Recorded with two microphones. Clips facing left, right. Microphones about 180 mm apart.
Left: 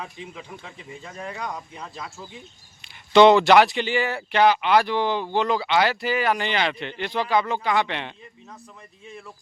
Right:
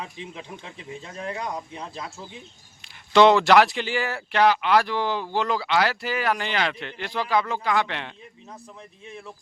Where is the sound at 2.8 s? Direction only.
Centre (ahead or behind).